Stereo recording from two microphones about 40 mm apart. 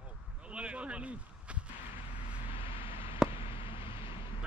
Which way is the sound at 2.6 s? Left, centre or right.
Right.